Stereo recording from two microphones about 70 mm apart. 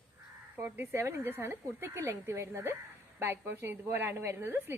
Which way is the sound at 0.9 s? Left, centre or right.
Right.